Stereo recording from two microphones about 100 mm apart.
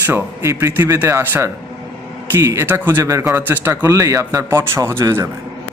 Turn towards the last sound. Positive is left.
turn(degrees=-25)  # may be behind; listen again after turning